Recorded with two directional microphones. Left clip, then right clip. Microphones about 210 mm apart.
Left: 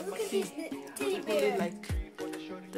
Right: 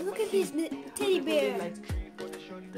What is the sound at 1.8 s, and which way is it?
Music, centre (ahead or behind).